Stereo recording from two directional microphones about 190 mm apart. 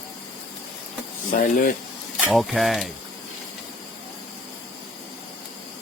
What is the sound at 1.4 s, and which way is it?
Speech, 45° left (ahead or behind).